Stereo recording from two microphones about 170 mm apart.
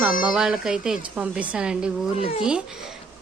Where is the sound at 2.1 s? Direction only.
35° left (ahead or behind).